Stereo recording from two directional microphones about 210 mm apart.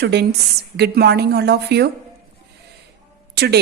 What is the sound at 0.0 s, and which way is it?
A woman's voice, 50° right (ahead or behind).